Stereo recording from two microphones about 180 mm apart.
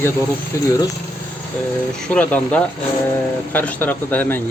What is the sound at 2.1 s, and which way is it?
Speech, 10° left (ahead or behind).